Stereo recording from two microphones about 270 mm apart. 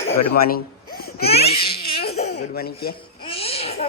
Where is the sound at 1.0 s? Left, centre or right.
Left.